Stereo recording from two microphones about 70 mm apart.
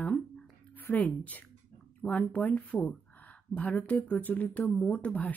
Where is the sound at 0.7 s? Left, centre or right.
Left.